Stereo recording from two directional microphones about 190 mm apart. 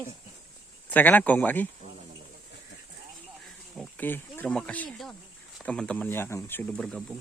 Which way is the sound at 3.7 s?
5° left (ahead or behind).